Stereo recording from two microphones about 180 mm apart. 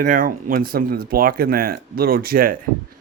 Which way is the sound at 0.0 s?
50° right (ahead or behind).